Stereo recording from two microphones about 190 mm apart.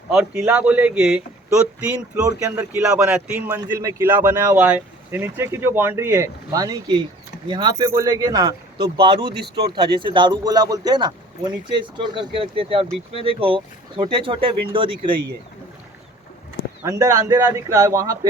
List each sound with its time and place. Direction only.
0.1 s speech: 10° right (ahead or behind)
9.3 s speech: 60° right (ahead or behind)
9.7 s speech: 25° right (ahead or behind)
16.8 s speech: 15° right (ahead or behind)